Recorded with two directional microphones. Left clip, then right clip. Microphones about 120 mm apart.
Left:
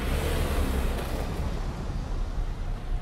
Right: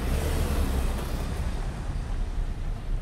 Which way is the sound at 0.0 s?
35° right (ahead or behind).